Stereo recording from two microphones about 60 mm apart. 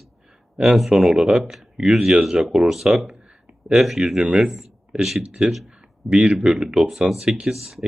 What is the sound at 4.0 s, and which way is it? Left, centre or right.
Speech, centre.